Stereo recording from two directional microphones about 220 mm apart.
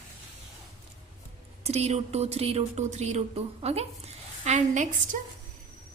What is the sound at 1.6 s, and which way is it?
Speech, 30° right (ahead or behind).